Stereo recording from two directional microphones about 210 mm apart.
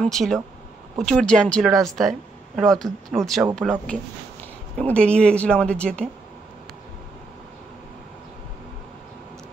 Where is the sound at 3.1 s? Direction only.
Centre (ahead or behind).